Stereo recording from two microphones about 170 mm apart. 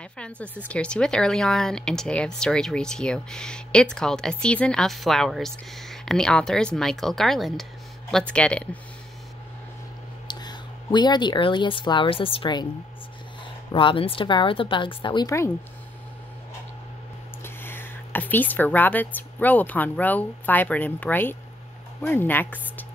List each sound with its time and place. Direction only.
0.2 s speech: 10° left (ahead or behind)
10.2 s speech: 25° left (ahead or behind)
13.7 s a woman's voice: 30° left (ahead or behind)
17.4 s speech: 10° left (ahead or behind)